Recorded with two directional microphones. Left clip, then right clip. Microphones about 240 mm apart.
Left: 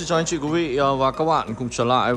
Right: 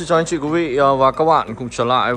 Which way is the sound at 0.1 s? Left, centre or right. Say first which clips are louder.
Right 5 dB; centre.